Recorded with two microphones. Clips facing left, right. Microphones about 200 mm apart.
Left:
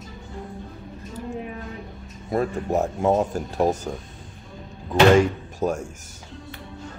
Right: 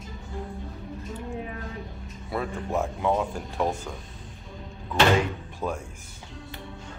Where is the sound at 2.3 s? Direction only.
40° left (ahead or behind).